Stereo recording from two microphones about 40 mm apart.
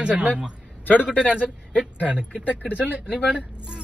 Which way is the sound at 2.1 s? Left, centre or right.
Right.